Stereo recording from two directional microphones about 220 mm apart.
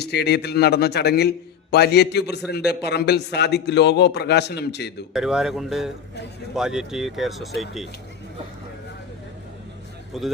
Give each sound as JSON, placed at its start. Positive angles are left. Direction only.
{"t": 0.0, "sound": "a man's voice", "side_deg": 50}
{"t": 5.1, "sound": "speech", "side_deg": -5}
{"t": 10.1, "sound": "speech", "side_deg": 0}